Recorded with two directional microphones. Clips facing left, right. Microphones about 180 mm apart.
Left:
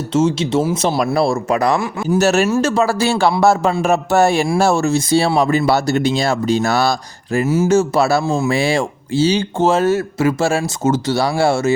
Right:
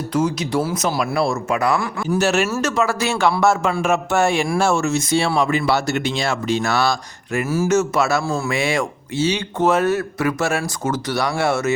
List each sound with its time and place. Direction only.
0.1 s speech: 25° left (ahead or behind)
0.9 s speech: 40° left (ahead or behind)
7.4 s speech: 20° left (ahead or behind)
7.7 s speech: 30° left (ahead or behind)